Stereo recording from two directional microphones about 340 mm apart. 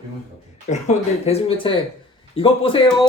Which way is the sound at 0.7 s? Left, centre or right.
Centre.